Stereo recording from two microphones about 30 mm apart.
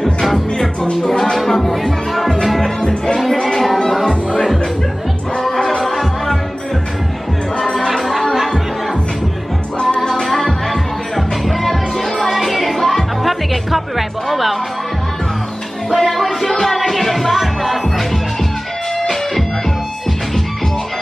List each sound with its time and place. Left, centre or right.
0.0 s music: centre
1.0 s music: left
1.4 s music: centre
2.8 s music: left
3.5 s a sound: centre
7.6 s music: centre
9.9 s music: centre
10.2 s music: centre
15.9 s music: centre
18.9 s music: centre